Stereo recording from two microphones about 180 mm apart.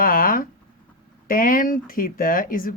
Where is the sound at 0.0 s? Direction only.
50° left (ahead or behind).